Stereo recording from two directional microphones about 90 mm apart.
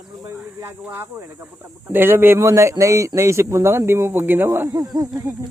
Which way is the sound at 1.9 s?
25° right (ahead or behind).